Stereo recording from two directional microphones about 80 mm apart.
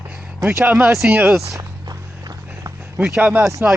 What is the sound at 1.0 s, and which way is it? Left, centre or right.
Speech, centre.